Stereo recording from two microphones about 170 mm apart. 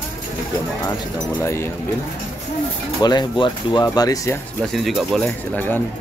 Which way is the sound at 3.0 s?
25° left (ahead or behind).